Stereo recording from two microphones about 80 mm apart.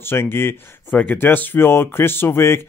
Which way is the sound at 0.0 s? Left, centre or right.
Left.